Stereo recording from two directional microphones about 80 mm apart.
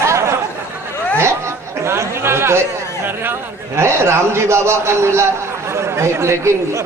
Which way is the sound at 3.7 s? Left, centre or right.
Right.